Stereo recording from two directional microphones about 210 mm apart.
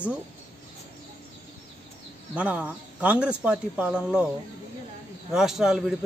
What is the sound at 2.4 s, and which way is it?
Speech, 5° right (ahead or behind).